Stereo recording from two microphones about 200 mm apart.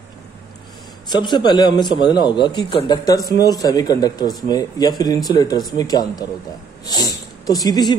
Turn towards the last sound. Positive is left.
turn(degrees=20)  # may be behind; listen again after turning